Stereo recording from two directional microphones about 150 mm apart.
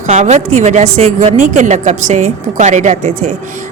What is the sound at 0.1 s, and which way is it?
A woman's voice, 50° right (ahead or behind).